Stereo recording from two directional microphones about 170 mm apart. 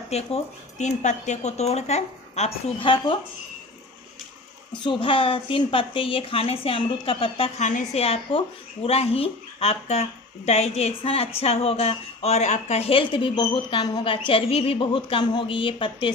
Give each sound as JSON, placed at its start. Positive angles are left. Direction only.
{"t": 0.1, "sound": "a woman's voice", "side_deg": 40}
{"t": 4.8, "sound": "a woman's voice", "side_deg": 30}